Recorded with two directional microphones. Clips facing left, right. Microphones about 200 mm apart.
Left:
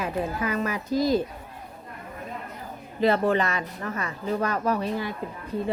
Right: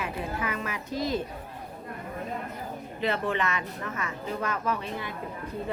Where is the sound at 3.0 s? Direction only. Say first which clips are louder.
Left 7 dB; 40° left (ahead or behind).